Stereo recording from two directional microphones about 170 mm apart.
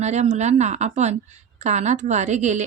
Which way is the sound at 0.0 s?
40° right (ahead or behind).